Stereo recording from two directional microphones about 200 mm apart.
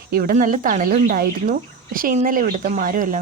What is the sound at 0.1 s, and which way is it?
Speech, 45° right (ahead or behind).